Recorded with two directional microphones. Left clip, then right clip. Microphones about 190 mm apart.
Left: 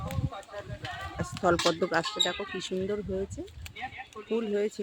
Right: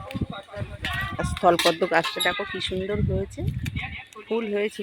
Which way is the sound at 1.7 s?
20° right (ahead or behind).